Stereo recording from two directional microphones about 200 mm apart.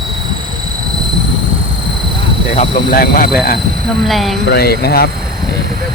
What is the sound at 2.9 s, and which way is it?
Speech, 45° left (ahead or behind).